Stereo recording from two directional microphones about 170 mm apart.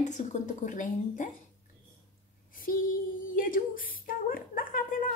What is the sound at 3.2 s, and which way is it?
Speech, 55° left (ahead or behind).